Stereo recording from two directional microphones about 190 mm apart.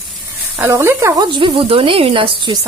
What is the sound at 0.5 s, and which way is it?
Speech, 10° right (ahead or behind).